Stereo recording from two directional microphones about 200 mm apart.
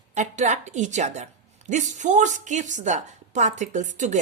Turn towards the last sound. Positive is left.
turn(degrees=-35)  # may be behind; listen again after turning